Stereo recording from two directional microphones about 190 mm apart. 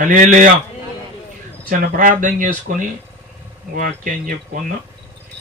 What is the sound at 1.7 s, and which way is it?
A man's voice, 45° right (ahead or behind).